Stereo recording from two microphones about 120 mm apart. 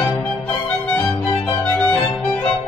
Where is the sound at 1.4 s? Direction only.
10° left (ahead or behind).